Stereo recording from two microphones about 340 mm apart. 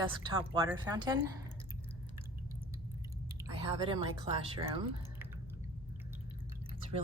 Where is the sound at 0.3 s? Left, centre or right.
Centre.